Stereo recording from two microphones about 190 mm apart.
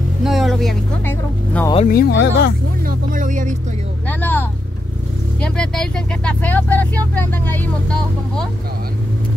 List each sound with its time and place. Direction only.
0.2 s speech: centre (ahead or behind)
1.9 s speech: 55° left (ahead or behind)
2.9 s speech: 45° right (ahead or behind)
4.2 s speech: 10° left (ahead or behind)